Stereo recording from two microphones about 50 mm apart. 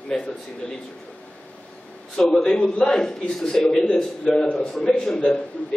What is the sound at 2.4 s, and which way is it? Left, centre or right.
A man's voice, centre.